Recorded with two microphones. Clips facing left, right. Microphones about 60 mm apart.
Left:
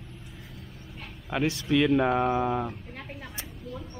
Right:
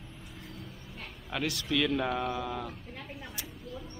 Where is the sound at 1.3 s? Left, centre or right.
Left.